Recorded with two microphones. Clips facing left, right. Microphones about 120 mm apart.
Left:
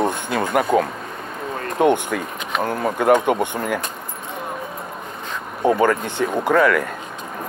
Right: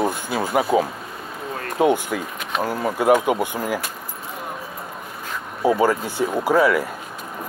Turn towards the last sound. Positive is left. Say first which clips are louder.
# left 1 dB
turn(degrees=-5)  # may be behind; listen again after turning